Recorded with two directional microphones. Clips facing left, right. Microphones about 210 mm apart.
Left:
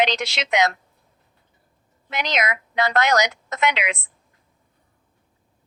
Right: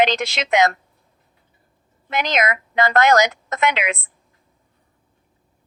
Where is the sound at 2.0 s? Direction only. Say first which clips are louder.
Right 4 dB; 50° right (ahead or behind).